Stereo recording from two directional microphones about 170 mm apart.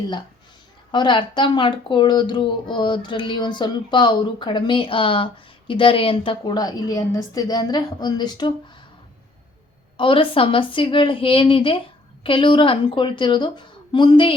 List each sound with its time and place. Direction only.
0.9 s speech: 25° left (ahead or behind)
10.0 s speech: 30° left (ahead or behind)